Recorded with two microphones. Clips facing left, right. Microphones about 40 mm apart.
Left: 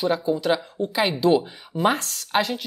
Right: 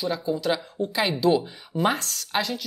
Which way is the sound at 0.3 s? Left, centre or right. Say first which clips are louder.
Left 3 dB; centre.